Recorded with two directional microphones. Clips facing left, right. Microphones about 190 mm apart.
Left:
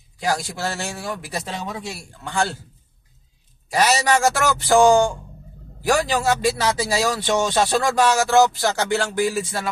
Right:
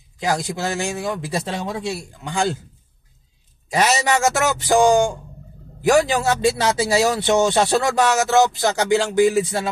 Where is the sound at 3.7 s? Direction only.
20° right (ahead or behind).